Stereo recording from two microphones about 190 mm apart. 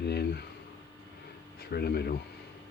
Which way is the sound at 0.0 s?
60° left (ahead or behind).